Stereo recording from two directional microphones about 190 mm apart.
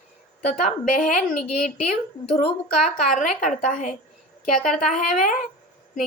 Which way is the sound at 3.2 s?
45° left (ahead or behind).